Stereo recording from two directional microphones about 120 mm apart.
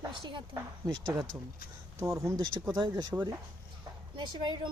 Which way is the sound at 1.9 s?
25° right (ahead or behind).